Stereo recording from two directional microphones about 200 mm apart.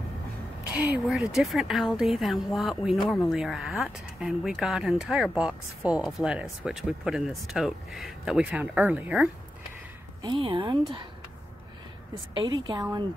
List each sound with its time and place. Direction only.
0.9 s speech: centre (ahead or behind)
10.2 s a woman's voice: 25° right (ahead or behind)
12.4 s a woman's voice: 25° right (ahead or behind)